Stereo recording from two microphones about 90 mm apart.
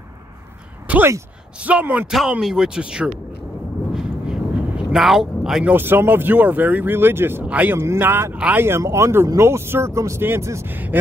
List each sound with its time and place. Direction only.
0.8 s a sound: 20° right (ahead or behind)
1.6 s speech: 15° right (ahead or behind)
3.9 s a sound: 5° right (ahead or behind)
5.7 s speech: 25° right (ahead or behind)
8.6 s speech: 30° right (ahead or behind)
10.7 s speech: 20° right (ahead or behind)